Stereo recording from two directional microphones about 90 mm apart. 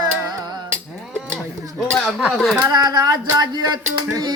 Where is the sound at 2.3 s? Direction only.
Centre (ahead or behind).